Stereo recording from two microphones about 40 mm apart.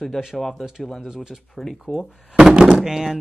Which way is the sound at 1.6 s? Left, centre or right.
Centre.